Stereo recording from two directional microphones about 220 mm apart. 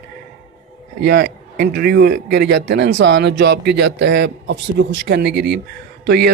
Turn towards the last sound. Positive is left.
turn(degrees=-45)  # may be behind; listen again after turning